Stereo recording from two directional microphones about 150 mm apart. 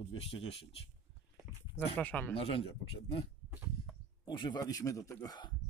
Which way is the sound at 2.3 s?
40° left (ahead or behind).